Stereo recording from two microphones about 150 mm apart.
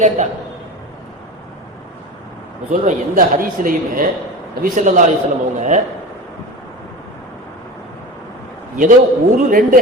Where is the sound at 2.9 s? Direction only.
65° right (ahead or behind).